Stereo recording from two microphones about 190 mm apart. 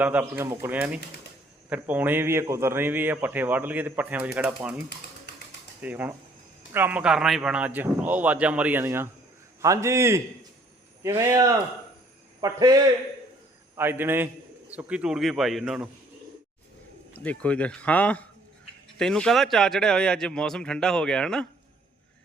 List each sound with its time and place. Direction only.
0.0 s a man's voice: 10° right (ahead or behind)
5.8 s a man's voice: 10° right (ahead or behind)
17.2 s speech: 5° left (ahead or behind)